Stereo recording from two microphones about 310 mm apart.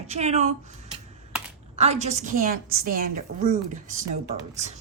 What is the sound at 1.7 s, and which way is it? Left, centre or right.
A woman's voice, right.